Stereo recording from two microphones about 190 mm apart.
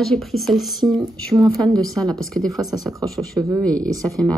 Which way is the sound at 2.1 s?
5° left (ahead or behind).